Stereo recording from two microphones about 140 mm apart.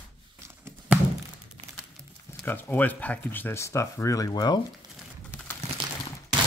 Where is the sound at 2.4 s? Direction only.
10° left (ahead or behind); by 4.6 s 30° left (ahead or behind).